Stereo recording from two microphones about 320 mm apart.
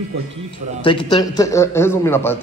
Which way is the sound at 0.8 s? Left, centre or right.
Centre.